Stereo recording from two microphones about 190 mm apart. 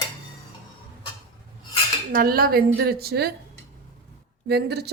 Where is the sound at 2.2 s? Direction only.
50° right (ahead or behind).